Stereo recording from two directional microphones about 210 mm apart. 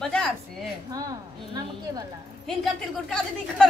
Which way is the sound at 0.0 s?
5° left (ahead or behind).